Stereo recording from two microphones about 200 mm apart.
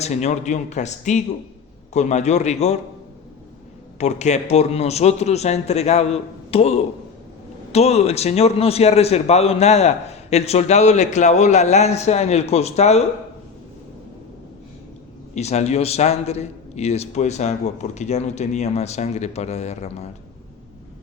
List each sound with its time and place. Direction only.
0.0 s a man's voice: 35° left (ahead or behind)
4.0 s a man's voice: 35° left (ahead or behind)
15.4 s a man's voice: 35° left (ahead or behind)